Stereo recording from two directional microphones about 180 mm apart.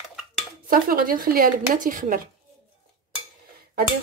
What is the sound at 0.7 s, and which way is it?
Speech, 50° right (ahead or behind).